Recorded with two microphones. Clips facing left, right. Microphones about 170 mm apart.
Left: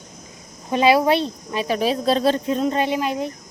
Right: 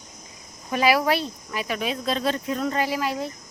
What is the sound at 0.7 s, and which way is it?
Speech, 25° left (ahead or behind).